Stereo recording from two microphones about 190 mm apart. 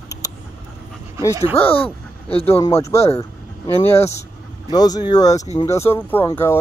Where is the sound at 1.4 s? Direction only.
30° left (ahead or behind).